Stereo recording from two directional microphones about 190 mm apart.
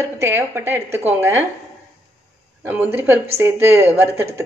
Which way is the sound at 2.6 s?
10° right (ahead or behind).